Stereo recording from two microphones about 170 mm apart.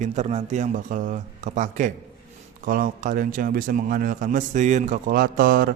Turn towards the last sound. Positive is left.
turn(degrees=-55)  # may be behind; listen again after turning